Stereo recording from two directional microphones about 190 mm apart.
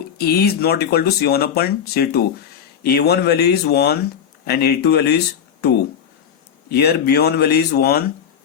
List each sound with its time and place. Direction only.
0.2 s speech: 55° left (ahead or behind)
6.7 s speech: 55° left (ahead or behind)